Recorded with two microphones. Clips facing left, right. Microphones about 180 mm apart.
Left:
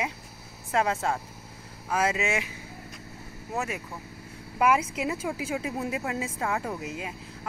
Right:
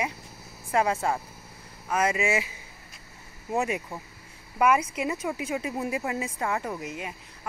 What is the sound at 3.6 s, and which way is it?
Speech, 15° right (ahead or behind).